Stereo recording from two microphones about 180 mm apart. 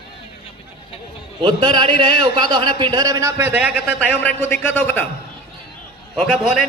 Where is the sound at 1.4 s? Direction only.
25° right (ahead or behind); by 3.8 s 10° right (ahead or behind).